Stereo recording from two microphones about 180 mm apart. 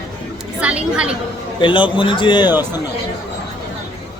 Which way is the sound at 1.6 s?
25° left (ahead or behind).